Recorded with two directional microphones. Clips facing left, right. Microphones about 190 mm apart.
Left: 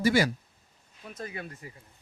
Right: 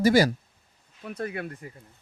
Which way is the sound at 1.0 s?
60° right (ahead or behind).